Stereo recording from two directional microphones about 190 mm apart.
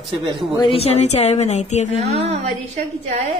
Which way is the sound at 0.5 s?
30° left (ahead or behind).